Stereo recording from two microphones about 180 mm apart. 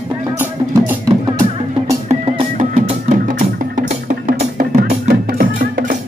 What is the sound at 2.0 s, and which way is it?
Music, 35° right (ahead or behind).